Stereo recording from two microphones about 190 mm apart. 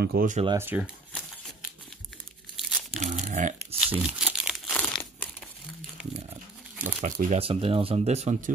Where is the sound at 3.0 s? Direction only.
40° right (ahead or behind).